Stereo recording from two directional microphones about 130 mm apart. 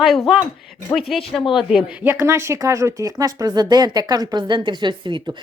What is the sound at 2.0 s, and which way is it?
Speech, 20° right (ahead or behind).